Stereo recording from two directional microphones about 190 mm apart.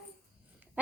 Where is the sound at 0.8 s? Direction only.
10° right (ahead or behind).